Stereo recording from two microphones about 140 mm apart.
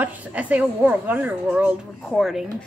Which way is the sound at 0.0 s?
10° right (ahead or behind).